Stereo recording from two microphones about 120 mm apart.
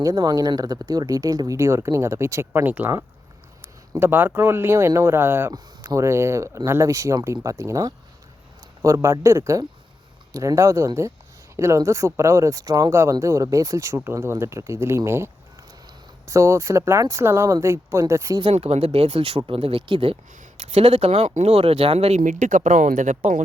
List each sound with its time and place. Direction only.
0.0 s speech: 30° right (ahead or behind); by 2.9 s 15° right (ahead or behind)
3.9 s speech: 20° right (ahead or behind)
18.5 s speech: 60° right (ahead or behind)
20.6 s speech: 65° right (ahead or behind); by 23.3 s 90° right